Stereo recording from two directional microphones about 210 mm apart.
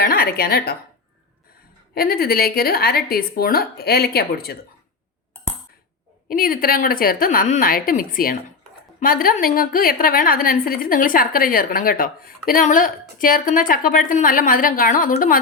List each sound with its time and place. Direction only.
0.0 s speech: 45° left (ahead or behind)
2.0 s speech: 45° left (ahead or behind)
6.2 s a woman's voice: 40° left (ahead or behind)